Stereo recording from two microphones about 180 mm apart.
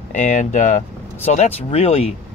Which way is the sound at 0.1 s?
45° left (ahead or behind).